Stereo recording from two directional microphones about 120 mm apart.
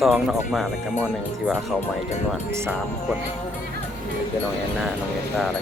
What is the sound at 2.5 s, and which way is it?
Speech, 20° right (ahead or behind).